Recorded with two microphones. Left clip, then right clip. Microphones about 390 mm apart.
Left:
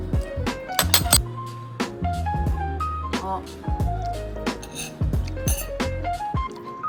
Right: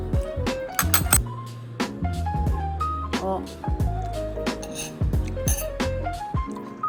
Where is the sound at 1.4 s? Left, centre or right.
Centre.